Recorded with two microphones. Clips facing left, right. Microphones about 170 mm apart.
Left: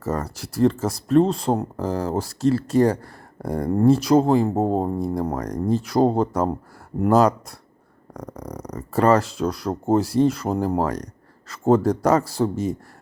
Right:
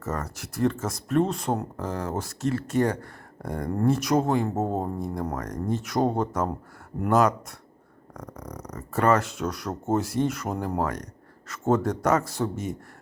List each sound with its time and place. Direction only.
0.0 s speech: 35° left (ahead or behind)